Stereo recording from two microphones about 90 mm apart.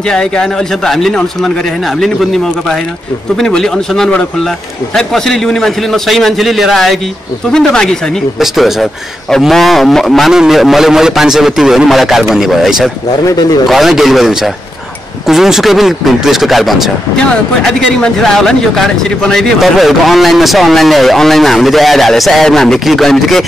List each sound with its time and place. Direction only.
0.1 s a man's voice: 10° left (ahead or behind)
8.4 s a man's voice: 5° right (ahead or behind)
13.2 s speech: 45° left (ahead or behind)
13.7 s a man's voice: centre (ahead or behind)